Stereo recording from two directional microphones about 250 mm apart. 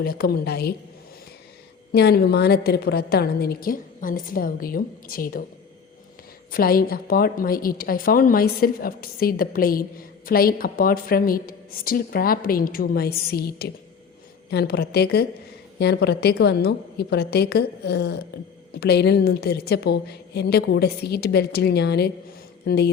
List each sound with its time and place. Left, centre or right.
0.0 s a woman's voice: left
1.9 s a woman's voice: left
6.5 s a woman's voice: left